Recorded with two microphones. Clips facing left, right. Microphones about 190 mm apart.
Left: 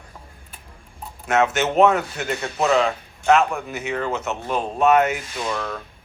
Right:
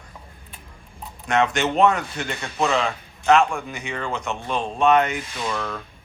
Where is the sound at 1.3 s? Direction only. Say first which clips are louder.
Left 1 dB; 5° left (ahead or behind).